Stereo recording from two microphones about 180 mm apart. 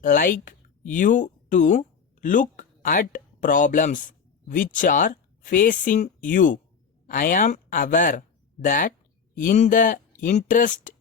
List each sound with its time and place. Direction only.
0.0 s speech: 50° left (ahead or behind)